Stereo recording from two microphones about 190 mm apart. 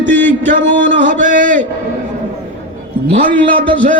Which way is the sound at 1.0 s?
45° right (ahead or behind).